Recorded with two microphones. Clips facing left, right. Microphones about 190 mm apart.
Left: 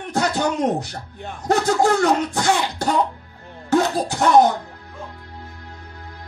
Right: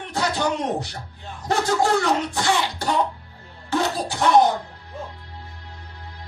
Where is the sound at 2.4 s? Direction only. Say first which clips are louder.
Left 2 dB; 45° left (ahead or behind).